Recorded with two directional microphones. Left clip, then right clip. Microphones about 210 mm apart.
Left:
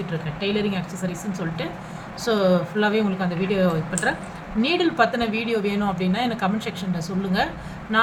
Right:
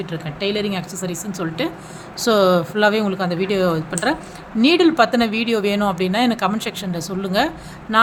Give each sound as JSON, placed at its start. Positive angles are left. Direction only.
{"t": 0.3, "sound": "speech", "side_deg": -55}